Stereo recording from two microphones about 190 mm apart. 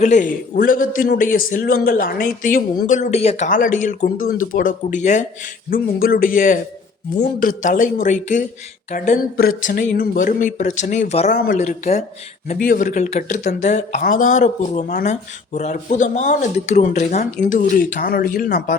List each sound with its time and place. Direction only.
0.0 s speech: 40° left (ahead or behind)
5.7 s speech: 50° left (ahead or behind)